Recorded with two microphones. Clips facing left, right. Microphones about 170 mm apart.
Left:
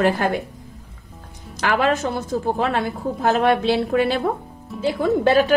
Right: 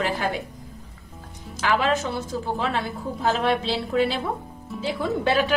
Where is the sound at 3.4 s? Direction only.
55° left (ahead or behind).